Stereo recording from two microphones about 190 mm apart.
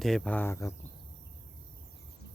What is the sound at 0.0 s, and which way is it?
Speech, 5° left (ahead or behind).